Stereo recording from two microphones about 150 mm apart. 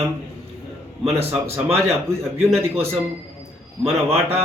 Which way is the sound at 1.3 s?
15° right (ahead or behind).